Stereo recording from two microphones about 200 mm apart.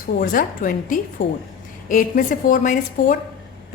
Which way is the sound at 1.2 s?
60° left (ahead or behind).